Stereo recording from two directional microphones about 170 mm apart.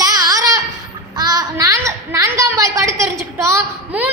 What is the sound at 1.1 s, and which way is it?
A woman's voice, 25° right (ahead or behind).